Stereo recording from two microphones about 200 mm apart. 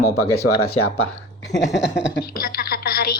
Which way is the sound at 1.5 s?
60° left (ahead or behind).